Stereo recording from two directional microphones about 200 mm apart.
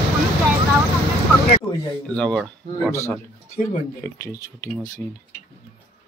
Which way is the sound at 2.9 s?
15° left (ahead or behind).